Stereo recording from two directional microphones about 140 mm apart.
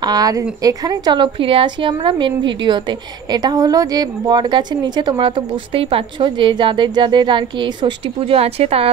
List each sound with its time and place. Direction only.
0.0 s a woman's voice: 25° right (ahead or behind); by 8.9 s 45° right (ahead or behind)